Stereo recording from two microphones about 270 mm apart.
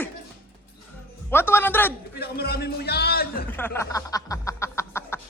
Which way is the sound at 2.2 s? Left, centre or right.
Left.